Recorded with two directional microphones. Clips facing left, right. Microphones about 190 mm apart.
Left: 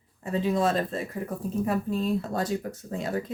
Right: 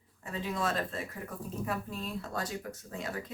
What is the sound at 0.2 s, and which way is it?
Speech, 30° left (ahead or behind).